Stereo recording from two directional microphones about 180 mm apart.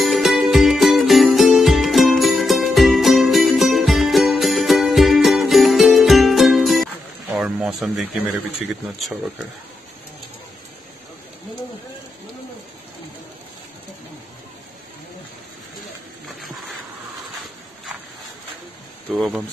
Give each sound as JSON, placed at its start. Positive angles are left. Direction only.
{"t": 0.0, "sound": "music", "side_deg": 0}
{"t": 8.3, "sound": "speech", "side_deg": 0}
{"t": 19.1, "sound": "speech", "side_deg": 0}